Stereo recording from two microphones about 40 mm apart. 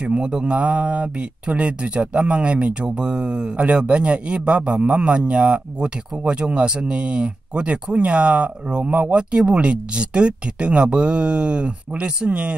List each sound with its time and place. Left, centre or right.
0.0 s speech: right
0.6 s speech: right